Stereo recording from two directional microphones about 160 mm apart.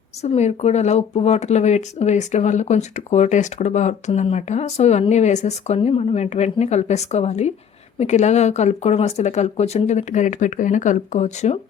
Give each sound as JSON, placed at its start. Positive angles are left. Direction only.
{"t": 0.2, "sound": "speech", "side_deg": 45}